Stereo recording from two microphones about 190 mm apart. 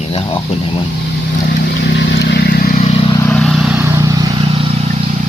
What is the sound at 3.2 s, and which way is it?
Vehicle, centre (ahead or behind).